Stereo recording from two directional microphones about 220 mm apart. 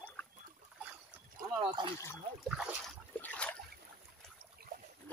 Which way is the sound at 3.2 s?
5° left (ahead or behind).